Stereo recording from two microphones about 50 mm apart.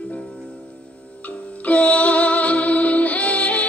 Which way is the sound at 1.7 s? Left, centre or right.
Left.